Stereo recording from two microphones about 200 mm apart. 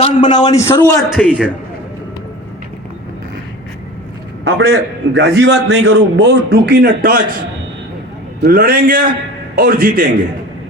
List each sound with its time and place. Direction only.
0.0 s a man's voice: 25° left (ahead or behind)
1.1 s a man's voice: 5° right (ahead or behind)
4.4 s a man's voice: 65° right (ahead or behind); by 7.3 s 50° right (ahead or behind)
8.4 s a man's voice: 50° right (ahead or behind)